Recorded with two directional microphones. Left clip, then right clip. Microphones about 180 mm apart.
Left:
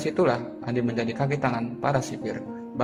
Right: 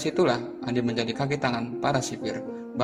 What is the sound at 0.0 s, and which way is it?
A man's voice, 30° right (ahead or behind).